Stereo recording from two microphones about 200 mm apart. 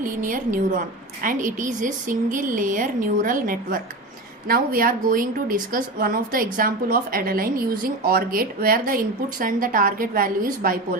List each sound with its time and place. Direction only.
0.0 s a woman's voice: 40° right (ahead or behind)